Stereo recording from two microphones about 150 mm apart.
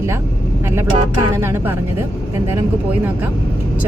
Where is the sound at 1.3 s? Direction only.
15° right (ahead or behind).